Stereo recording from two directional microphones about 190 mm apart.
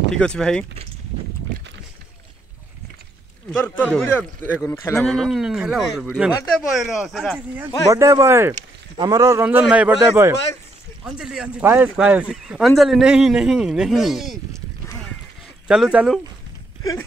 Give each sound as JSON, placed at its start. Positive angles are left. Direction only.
{"t": 0.1, "sound": "speech", "side_deg": 5}
{"t": 3.5, "sound": "a man's voice", "side_deg": 10}
{"t": 15.7, "sound": "speech", "side_deg": -5}